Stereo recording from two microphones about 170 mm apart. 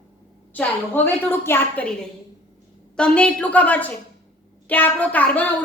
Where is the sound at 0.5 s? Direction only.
10° left (ahead or behind).